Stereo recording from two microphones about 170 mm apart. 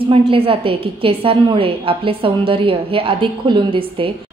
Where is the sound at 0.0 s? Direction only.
30° right (ahead or behind).